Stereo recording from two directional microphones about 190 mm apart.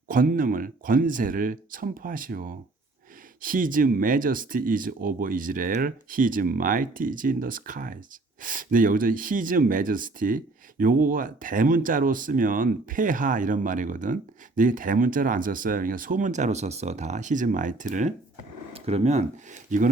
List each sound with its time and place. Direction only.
0.1 s speech: 45° right (ahead or behind)